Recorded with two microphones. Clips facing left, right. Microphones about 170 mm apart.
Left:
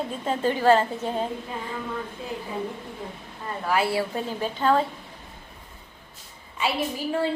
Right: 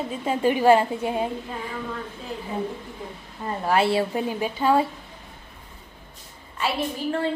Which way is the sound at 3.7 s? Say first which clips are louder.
Right 3 dB; 25° right (ahead or behind).